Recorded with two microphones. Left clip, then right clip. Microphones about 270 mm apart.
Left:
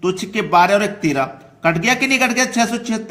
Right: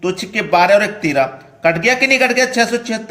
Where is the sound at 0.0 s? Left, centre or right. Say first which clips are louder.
Right 1 dB; centre.